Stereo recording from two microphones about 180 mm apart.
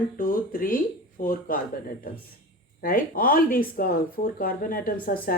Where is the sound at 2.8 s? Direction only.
50° left (ahead or behind).